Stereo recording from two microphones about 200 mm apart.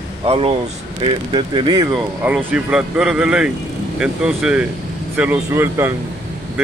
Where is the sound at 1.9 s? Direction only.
5° right (ahead or behind).